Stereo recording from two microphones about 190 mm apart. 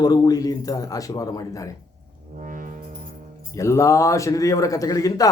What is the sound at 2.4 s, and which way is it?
Music, 45° right (ahead or behind).